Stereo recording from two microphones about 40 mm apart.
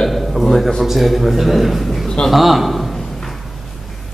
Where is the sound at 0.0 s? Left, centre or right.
Centre.